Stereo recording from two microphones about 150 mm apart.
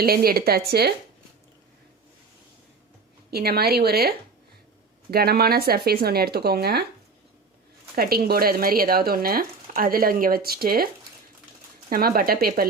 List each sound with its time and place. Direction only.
0.0 s speech: 90° right
3.2 s speech: 90° right
5.1 s speech: 90° right
7.9 s speech: 85° right
11.9 s speech: 75° right (ahead or behind)